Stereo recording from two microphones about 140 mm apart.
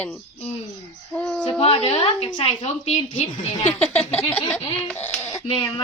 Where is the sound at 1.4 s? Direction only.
40° left (ahead or behind).